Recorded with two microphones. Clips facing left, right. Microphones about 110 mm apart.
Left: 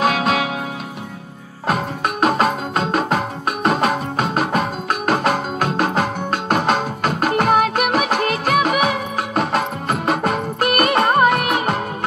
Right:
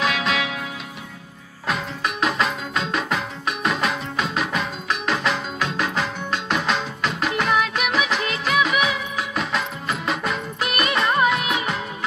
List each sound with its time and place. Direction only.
0.0 s music: 45° left (ahead or behind)
1.7 s music: 50° left (ahead or behind)